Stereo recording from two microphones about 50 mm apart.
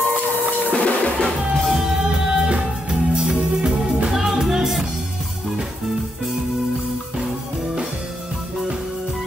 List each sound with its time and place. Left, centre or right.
0.7 s drum: left
1.6 s music: centre